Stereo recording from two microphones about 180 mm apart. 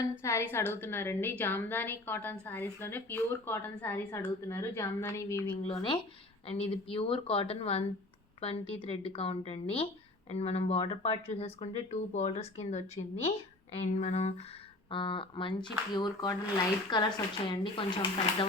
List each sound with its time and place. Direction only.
0.0 s a woman's voice: 15° left (ahead or behind)
5.6 s speech: 30° left (ahead or behind)